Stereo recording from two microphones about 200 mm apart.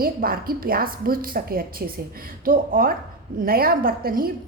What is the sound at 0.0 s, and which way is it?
A woman's voice, 45° right (ahead or behind).